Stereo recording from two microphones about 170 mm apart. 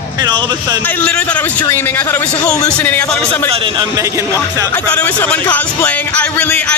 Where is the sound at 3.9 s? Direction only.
20° right (ahead or behind).